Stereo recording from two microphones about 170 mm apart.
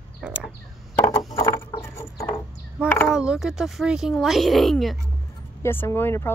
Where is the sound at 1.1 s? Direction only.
20° left (ahead or behind).